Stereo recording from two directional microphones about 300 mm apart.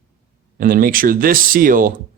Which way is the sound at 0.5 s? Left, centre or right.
Right.